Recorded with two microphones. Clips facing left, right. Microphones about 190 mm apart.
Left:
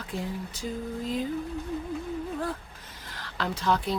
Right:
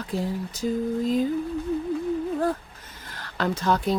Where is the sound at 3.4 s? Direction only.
45° right (ahead or behind).